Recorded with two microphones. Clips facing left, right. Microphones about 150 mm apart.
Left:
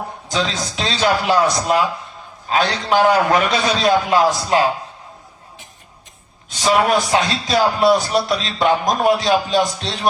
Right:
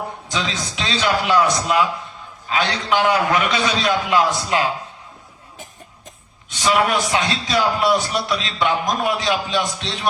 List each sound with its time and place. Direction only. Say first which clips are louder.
0.3 s a man's voice: left 5 dB; 35° left (ahead or behind)
6.5 s a man's voice: left 3 dB; 35° left (ahead or behind)